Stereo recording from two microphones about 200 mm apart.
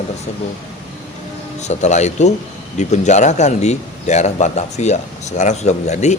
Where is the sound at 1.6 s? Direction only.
35° left (ahead or behind).